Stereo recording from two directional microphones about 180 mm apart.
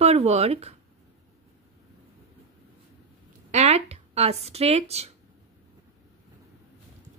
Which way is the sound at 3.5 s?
35° right (ahead or behind).